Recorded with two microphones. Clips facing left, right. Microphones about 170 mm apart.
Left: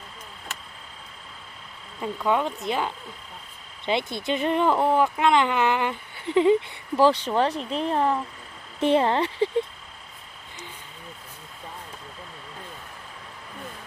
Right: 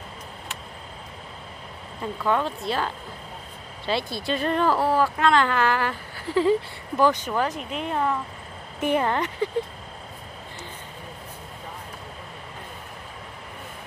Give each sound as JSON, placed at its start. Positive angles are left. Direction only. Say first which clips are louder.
{"t": 2.2, "sound": "speech", "louder": "even", "side_deg": 15}